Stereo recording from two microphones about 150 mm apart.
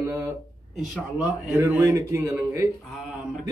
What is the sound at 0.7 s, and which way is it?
Speech, centre (ahead or behind).